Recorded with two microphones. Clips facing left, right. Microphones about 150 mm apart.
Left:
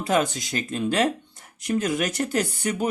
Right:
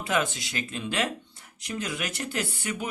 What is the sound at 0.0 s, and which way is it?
Speech, 40° left (ahead or behind).